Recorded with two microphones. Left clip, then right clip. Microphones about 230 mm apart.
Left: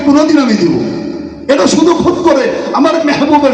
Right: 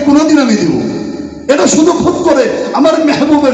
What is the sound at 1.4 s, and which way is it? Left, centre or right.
A man's voice, left.